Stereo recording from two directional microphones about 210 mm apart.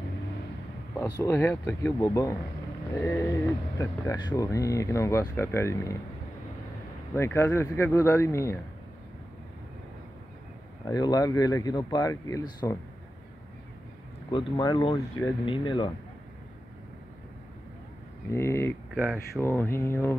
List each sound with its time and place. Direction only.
0.9 s speech: 15° left (ahead or behind)
7.2 s speech: 10° left (ahead or behind)
10.9 s speech: 20° left (ahead or behind)
14.3 s speech: 20° left (ahead or behind)
18.3 s speech: 10° left (ahead or behind)
18.9 s speech: 5° right (ahead or behind)
19.4 s speech: 10° left (ahead or behind)